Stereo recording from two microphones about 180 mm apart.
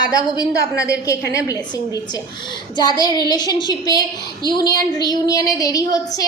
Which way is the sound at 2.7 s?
25° left (ahead or behind).